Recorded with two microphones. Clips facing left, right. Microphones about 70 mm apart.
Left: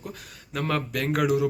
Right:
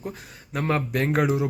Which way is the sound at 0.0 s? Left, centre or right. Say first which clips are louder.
Right 4 dB; right.